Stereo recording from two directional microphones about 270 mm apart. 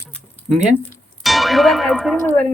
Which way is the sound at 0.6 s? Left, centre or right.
Centre.